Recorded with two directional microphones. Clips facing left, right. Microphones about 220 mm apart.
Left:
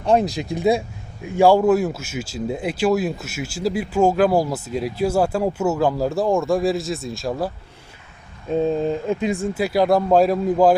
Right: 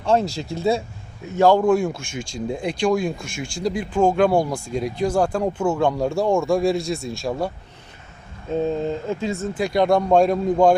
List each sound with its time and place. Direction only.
0.0 s speech: 15° left (ahead or behind)
8.5 s speech: 15° left (ahead or behind)